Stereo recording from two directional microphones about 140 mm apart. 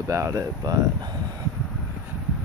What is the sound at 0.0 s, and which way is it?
Speech, 20° right (ahead or behind).